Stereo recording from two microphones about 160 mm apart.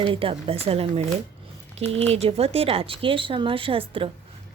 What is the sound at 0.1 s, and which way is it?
Speech, 35° right (ahead or behind).